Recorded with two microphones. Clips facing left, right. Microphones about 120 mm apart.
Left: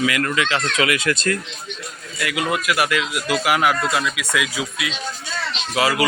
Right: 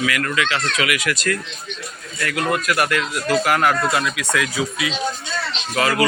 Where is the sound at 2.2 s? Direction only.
5° left (ahead or behind).